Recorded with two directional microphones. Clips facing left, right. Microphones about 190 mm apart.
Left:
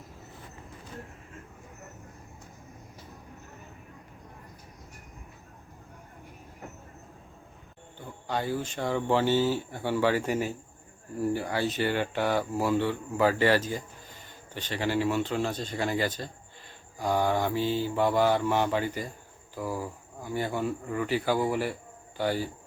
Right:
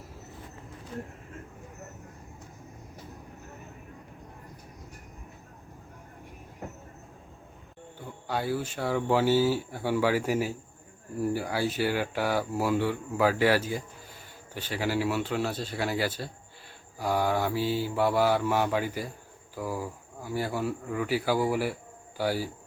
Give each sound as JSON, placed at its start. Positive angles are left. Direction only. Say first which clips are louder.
{"t": 8.3, "sound": "speech", "louder": "even", "side_deg": -10}